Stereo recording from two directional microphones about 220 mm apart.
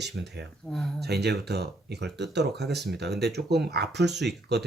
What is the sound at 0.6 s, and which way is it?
Speech, centre (ahead or behind).